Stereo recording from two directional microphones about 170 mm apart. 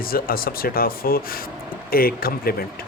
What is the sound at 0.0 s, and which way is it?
Speech, 60° left (ahead or behind).